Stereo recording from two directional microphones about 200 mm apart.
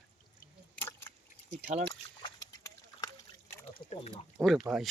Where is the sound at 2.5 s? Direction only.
15° left (ahead or behind).